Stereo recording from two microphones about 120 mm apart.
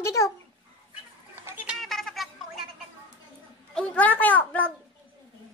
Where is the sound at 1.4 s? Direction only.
15° right (ahead or behind).